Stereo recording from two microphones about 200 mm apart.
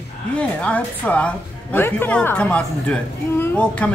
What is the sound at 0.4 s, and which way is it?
A woman's voice, 5° left (ahead or behind).